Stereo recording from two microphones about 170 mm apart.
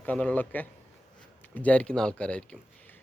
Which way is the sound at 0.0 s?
10° left (ahead or behind).